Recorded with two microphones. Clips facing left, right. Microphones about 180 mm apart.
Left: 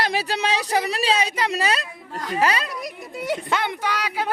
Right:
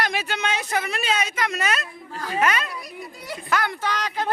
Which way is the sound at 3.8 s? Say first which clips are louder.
Left 1 dB; 10° left (ahead or behind).